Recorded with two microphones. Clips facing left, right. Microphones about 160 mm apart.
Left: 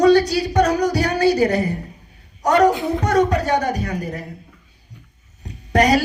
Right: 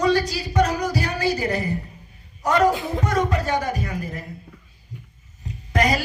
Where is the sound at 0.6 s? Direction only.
70° left (ahead or behind).